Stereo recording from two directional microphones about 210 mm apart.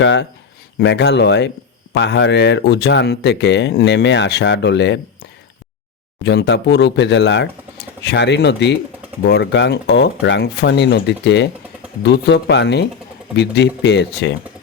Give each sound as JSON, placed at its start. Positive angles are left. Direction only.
{"t": 0.0, "sound": "speech", "side_deg": 60}